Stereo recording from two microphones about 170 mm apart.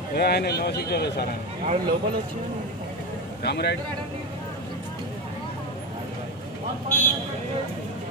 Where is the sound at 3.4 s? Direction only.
75° left (ahead or behind).